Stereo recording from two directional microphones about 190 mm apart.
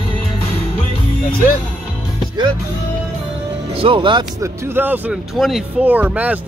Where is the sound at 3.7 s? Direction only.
25° right (ahead or behind); by 6.4 s 10° right (ahead or behind).